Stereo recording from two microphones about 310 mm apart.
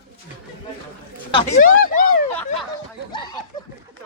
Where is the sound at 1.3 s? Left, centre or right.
Left.